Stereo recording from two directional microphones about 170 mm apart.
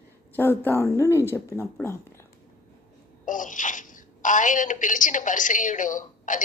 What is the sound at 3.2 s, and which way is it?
Speech, 50° left (ahead or behind).